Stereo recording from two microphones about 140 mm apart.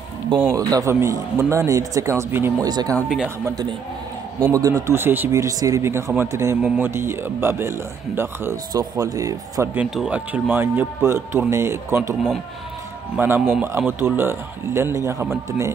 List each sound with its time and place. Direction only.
0.5 s speech: 25° right (ahead or behind)
2.7 s speech: 30° right (ahead or behind)
4.4 s speech: 25° right (ahead or behind)
9.8 s speech: 5° right (ahead or behind); by 15.2 s 20° right (ahead or behind)